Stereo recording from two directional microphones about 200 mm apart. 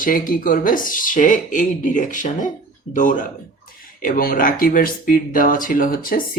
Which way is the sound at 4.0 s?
45° left (ahead or behind).